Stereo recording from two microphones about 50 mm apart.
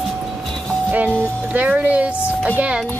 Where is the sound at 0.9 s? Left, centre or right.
Right.